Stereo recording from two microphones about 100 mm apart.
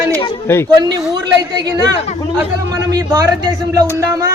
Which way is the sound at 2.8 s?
35° right (ahead or behind).